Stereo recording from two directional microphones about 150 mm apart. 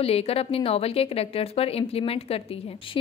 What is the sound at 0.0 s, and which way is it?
A woman's voice, 40° left (ahead or behind).